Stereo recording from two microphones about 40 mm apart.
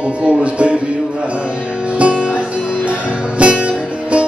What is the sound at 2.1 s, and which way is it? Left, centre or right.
Music, right.